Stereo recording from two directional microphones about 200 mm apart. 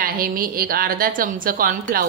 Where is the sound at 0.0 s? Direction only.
45° right (ahead or behind).